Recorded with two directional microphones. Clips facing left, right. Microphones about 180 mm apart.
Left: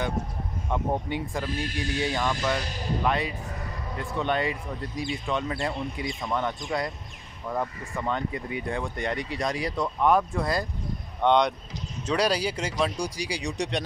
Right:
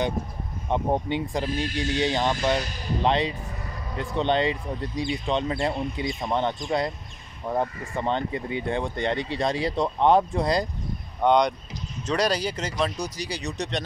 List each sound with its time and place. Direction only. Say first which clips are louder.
0.7 s speech: right 4 dB; 25° right (ahead or behind)
11.1 s speech: right 1 dB; centre (ahead or behind)